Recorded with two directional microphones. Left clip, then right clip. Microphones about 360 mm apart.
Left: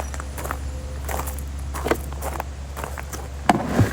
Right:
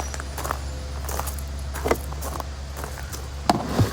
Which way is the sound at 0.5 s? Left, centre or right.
Centre.